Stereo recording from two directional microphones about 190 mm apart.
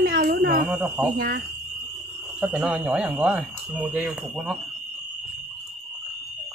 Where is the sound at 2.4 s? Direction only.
10° right (ahead or behind).